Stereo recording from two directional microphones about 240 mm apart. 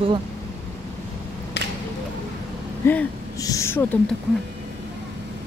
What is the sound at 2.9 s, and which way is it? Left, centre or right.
Speech, centre.